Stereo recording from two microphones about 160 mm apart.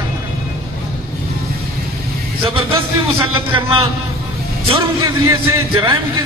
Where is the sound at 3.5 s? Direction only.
35° right (ahead or behind).